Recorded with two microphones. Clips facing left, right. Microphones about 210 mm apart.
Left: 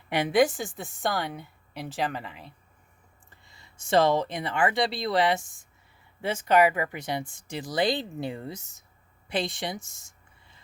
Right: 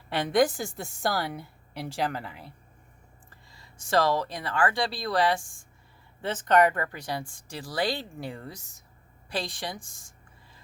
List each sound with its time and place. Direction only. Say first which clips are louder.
0.1 s a woman's voice: left 1 dB; 10° left (ahead or behind)
3.2 s speech: even; 25° left (ahead or behind)
6.2 s speech: left 1 dB; 10° left (ahead or behind)